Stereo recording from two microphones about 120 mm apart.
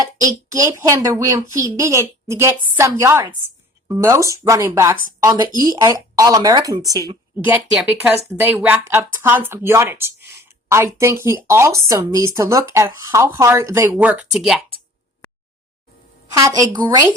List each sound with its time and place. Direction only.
0.0 s speech: 30° right (ahead or behind)
8.4 s speech: 15° right (ahead or behind)
13.9 s speech: 10° right (ahead or behind)
16.3 s speech: 30° right (ahead or behind)